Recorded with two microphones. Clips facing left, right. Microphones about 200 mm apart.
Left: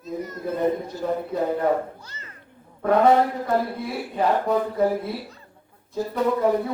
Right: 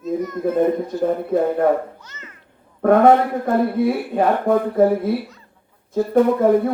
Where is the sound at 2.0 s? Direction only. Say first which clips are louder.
Right 2 dB; 35° left (ahead or behind).